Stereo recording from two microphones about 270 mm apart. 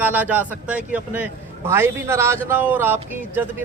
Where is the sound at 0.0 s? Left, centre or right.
Centre.